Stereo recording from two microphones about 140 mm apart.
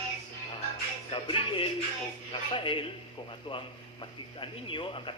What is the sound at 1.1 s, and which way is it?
A man's voice, 40° left (ahead or behind).